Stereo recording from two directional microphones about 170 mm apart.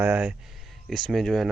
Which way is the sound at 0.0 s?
5° right (ahead or behind).